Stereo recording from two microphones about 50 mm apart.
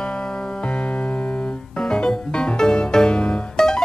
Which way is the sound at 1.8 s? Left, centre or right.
Centre.